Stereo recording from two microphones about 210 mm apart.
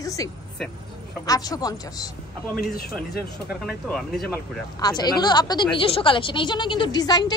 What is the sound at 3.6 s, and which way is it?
Speech, centre (ahead or behind).